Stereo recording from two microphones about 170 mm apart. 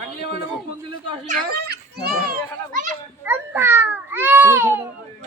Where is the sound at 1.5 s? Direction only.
70° right (ahead or behind).